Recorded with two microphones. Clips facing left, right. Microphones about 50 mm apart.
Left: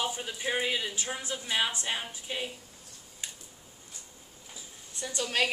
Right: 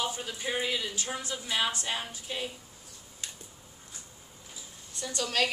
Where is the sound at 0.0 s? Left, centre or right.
Centre.